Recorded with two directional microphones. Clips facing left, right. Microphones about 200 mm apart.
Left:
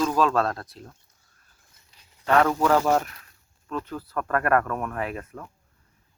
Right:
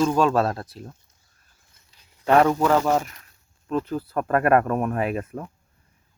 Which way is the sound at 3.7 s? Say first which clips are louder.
Right 6 dB; 25° right (ahead or behind).